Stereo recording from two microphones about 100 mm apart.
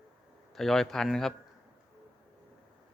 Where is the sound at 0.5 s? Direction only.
5° left (ahead or behind).